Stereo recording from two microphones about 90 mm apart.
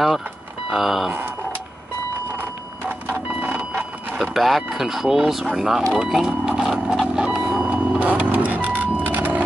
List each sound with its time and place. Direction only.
0.7 s speech: centre (ahead or behind)
3.1 s vehicle: 20° right (ahead or behind)
4.2 s speech: centre (ahead or behind)
5.9 s a sound: 5° right (ahead or behind)